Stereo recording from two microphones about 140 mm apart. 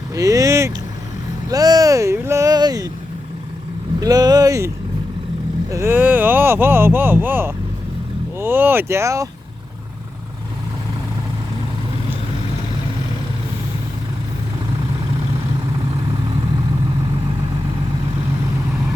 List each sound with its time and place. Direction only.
0.1 s vehicle: 25° right (ahead or behind)
4.0 s speech: 25° right (ahead or behind)
5.7 s speech: 15° right (ahead or behind)